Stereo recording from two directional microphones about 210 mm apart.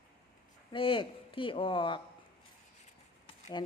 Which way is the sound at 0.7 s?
25° left (ahead or behind).